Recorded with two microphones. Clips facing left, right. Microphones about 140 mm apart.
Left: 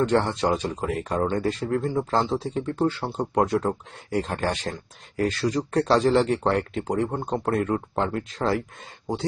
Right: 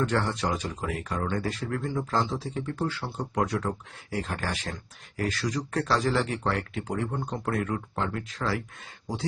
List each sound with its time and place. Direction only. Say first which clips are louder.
0.0 s speech: left 5 dB; 30° left (ahead or behind)